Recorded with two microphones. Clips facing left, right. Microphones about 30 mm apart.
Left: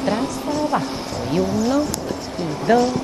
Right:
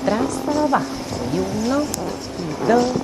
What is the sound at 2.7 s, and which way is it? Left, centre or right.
Speech, left.